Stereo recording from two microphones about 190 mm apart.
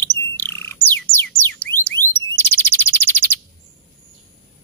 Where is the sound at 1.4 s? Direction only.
10° left (ahead or behind).